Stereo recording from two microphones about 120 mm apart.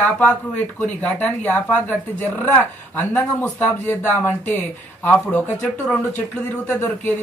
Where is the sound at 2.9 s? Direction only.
15° left (ahead or behind).